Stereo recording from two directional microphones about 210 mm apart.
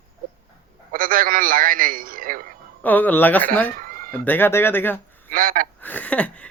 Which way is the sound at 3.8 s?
40° right (ahead or behind).